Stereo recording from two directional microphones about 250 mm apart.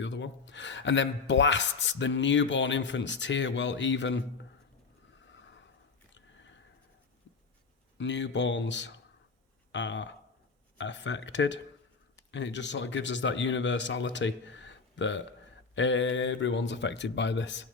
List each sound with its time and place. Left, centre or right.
0.0 s speech: left
6.1 s a sound: left
7.9 s speech: left